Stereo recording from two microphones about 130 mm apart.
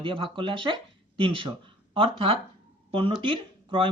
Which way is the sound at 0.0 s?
40° right (ahead or behind).